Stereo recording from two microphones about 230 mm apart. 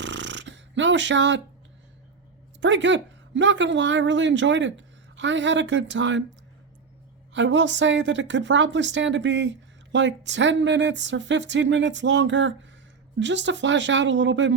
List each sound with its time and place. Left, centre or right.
0.0 s a sound: right
2.6 s speech: right
7.3 s speech: right